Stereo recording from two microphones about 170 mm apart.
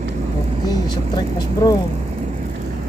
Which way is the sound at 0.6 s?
25° left (ahead or behind).